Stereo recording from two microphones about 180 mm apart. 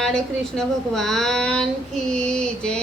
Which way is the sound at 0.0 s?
5° left (ahead or behind).